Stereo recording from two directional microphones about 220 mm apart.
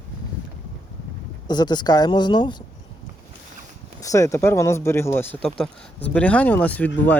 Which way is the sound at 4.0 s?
15° left (ahead or behind).